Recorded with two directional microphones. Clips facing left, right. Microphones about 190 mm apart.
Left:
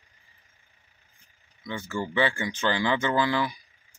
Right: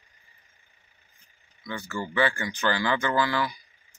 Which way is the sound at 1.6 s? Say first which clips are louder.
Left 2 dB; 25° left (ahead or behind).